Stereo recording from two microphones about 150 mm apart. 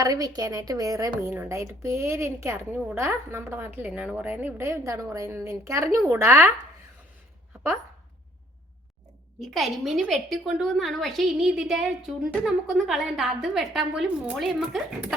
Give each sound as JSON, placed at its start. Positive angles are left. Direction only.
{"t": 0.0, "sound": "a woman's voice", "side_deg": -25}
{"t": 9.4, "sound": "a woman's voice", "side_deg": 0}